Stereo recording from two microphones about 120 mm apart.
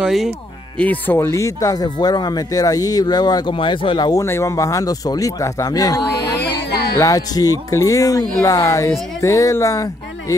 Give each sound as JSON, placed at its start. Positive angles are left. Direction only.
{"t": 0.0, "sound": "speech", "side_deg": -5}
{"t": 0.7, "sound": "speech", "side_deg": 15}
{"t": 3.5, "sound": "speech", "side_deg": 45}
{"t": 4.1, "sound": "speech", "side_deg": 25}
{"t": 7.0, "sound": "speech", "side_deg": 30}